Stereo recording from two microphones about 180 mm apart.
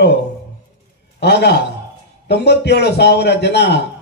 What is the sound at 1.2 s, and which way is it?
A man's voice, 70° left (ahead or behind).